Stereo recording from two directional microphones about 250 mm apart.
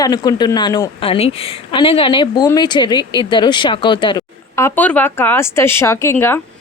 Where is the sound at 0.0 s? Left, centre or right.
Centre.